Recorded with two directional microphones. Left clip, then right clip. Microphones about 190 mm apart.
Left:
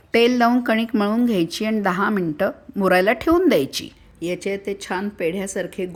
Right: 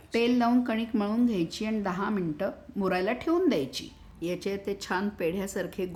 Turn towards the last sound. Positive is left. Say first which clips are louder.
# left 6 dB
turn(degrees=20)  # may be behind; listen again after turning